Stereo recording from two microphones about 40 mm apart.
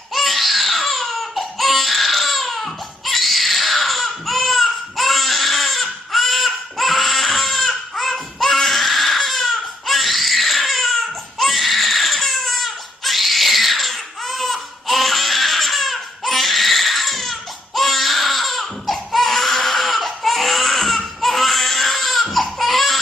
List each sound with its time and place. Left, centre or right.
0.1 s baby cry: centre